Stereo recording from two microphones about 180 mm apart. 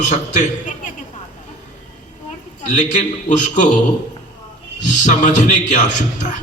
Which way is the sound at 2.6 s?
40° left (ahead or behind).